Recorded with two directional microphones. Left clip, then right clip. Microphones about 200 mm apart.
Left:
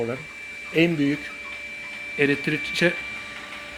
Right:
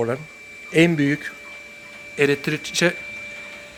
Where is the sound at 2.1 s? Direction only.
10° right (ahead or behind).